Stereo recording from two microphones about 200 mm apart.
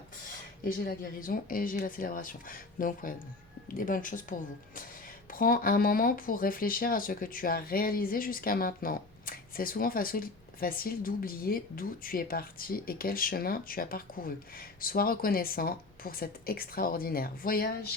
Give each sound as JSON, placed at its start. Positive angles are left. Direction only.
{"t": 0.6, "sound": "speech", "side_deg": 45}